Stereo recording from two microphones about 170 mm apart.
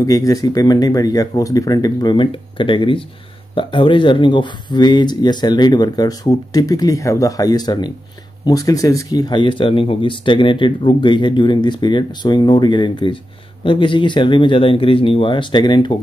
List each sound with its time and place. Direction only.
0.0 s speech: 20° left (ahead or behind)